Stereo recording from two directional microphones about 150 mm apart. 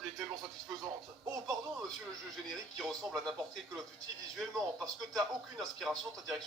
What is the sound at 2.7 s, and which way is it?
Speech, centre (ahead or behind).